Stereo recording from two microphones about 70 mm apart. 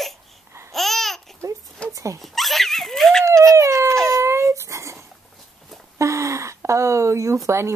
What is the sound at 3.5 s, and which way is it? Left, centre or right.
Dog, right.